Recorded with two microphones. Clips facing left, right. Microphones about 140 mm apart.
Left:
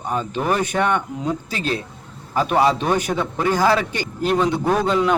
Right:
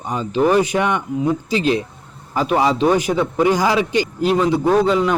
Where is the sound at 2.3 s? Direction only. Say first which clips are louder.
Even; 10° right (ahead or behind).